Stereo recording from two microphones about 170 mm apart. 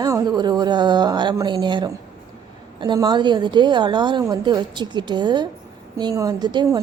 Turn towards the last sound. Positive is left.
turn(degrees=-25)  # may be behind; listen again after turning